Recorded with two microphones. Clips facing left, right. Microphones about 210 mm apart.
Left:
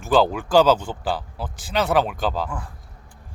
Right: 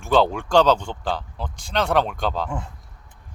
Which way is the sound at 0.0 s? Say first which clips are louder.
Even; centre (ahead or behind).